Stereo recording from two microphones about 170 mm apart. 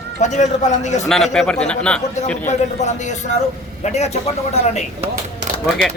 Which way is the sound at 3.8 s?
40° left (ahead or behind).